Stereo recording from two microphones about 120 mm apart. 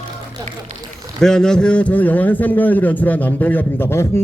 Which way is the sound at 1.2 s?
5° left (ahead or behind).